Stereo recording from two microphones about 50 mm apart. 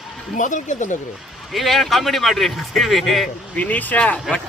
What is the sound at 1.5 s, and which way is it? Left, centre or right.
A man's voice, centre.